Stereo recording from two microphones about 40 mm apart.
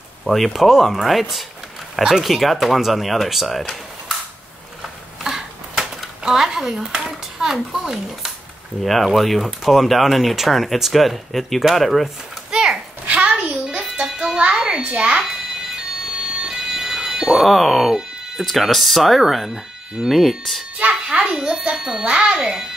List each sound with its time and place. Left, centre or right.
0.3 s speech: centre
5.2 s a sound: centre
6.2 s a child's voice: centre
8.8 s speech: centre
12.4 s a sound: centre
13.0 s a sound: right
13.7 s music: right
14.6 s a child's voice: right
16.3 s music: centre
17.5 s speech: centre
20.7 s music: right
21.2 s speech: centre
22.0 s speech: right
22.4 s speech: centre